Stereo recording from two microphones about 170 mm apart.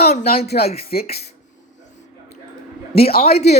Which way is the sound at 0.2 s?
65° left (ahead or behind).